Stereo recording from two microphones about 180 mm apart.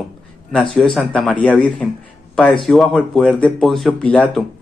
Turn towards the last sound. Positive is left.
turn(degrees=5)  # may be behind; listen again after turning